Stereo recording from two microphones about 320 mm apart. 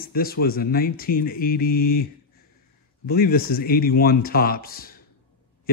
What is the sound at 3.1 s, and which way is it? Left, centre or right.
Speech, left.